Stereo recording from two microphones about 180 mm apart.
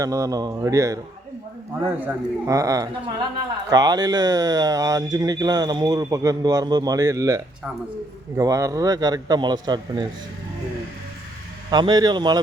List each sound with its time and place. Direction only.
0.0 s speech: 20° right (ahead or behind)
2.0 s speech: 15° right (ahead or behind)
11.7 s speech: 25° right (ahead or behind)